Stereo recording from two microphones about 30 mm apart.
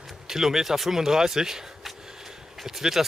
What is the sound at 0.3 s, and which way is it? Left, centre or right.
Speech, centre.